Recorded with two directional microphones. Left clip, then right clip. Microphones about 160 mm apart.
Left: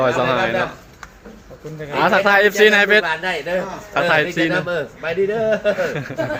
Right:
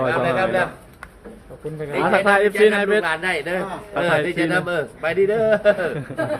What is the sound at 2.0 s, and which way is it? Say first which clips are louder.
A man's voice: left 3 dB; 5° left (ahead or behind).